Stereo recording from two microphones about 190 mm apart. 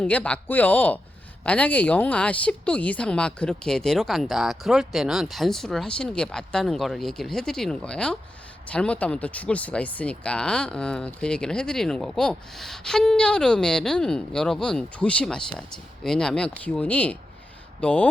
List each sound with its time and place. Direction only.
0.0 s speech: 5° left (ahead or behind)